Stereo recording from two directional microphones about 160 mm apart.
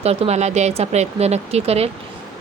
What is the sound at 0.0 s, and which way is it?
Speech, 40° right (ahead or behind).